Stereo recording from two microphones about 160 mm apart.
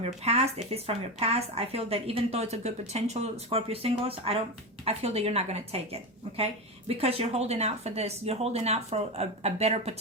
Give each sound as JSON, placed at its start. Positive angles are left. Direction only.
{"t": 0.0, "sound": "a woman's voice", "side_deg": -40}